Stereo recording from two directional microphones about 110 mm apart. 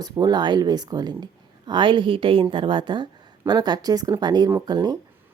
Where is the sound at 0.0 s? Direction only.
40° right (ahead or behind).